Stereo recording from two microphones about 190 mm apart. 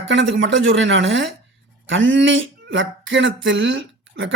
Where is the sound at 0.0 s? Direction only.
70° right (ahead or behind).